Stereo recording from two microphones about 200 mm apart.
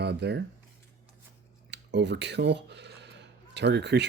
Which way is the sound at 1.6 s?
60° right (ahead or behind).